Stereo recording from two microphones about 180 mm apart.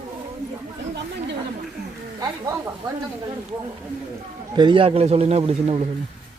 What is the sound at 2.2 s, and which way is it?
Speech, 20° right (ahead or behind).